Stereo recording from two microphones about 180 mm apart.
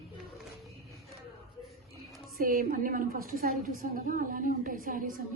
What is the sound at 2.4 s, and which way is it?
A woman's voice, 55° right (ahead or behind).